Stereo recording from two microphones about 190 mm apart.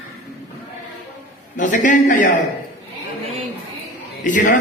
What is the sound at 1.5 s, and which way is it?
Speech, 40° left (ahead or behind).